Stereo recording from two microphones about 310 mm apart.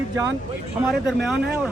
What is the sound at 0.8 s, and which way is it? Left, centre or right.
Speech, centre.